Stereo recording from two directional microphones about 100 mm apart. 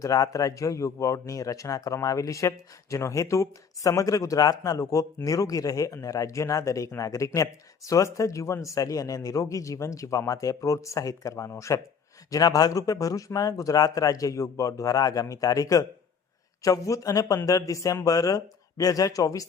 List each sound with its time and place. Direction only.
0.0 s a man's voice: 35° left (ahead or behind)